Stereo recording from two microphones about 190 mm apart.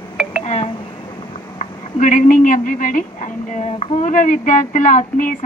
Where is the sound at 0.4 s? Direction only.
35° left (ahead or behind).